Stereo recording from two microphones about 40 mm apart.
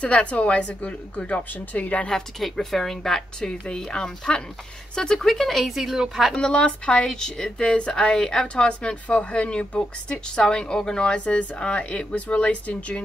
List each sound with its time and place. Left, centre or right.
0.0 s a woman's voice: left
2.4 s speech: centre
6.3 s speech: left